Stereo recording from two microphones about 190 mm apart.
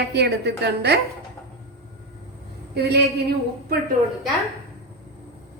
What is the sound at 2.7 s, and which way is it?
Speech, 60° right (ahead or behind).